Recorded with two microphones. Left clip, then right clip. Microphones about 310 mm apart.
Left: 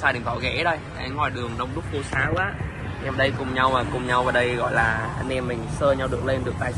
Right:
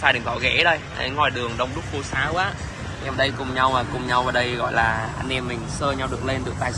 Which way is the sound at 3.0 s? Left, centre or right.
Centre.